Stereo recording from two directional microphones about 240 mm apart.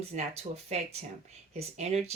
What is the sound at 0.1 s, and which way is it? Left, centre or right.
Speech, right.